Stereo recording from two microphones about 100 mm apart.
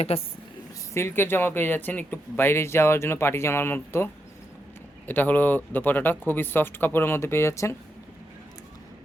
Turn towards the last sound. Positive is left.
turn(degrees=25)  # may be behind; listen again after turning